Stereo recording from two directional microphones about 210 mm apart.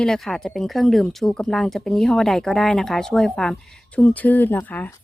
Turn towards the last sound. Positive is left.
turn(degrees=10)  # may be behind; listen again after turning